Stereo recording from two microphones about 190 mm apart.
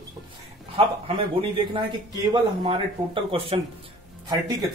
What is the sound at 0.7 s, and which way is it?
Speech, 30° right (ahead or behind).